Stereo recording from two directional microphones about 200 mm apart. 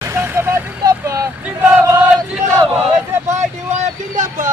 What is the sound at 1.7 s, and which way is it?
Chant, 10° right (ahead or behind).